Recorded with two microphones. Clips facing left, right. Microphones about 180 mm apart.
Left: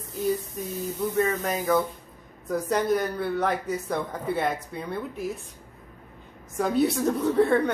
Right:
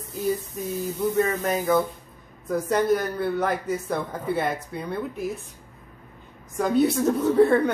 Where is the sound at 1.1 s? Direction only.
Centre (ahead or behind).